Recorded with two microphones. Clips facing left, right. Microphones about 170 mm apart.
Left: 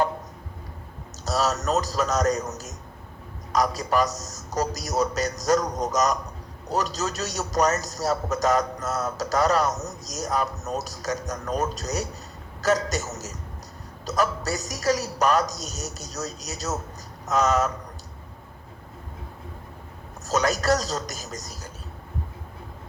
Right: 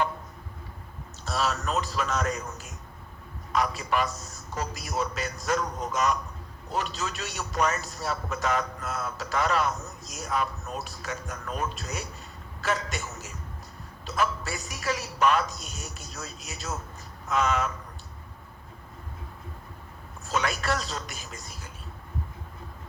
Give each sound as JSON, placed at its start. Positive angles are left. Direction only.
{"t": 1.2, "sound": "a man's voice", "side_deg": 40}
{"t": 20.2, "sound": "a man's voice", "side_deg": 40}